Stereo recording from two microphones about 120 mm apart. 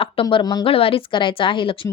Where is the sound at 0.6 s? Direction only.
50° left (ahead or behind).